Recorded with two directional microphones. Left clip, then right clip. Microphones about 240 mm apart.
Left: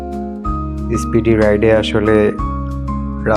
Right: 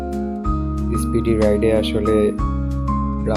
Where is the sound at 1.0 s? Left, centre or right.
Centre.